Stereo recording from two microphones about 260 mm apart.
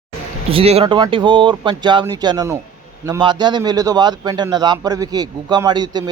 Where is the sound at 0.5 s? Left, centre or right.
Right.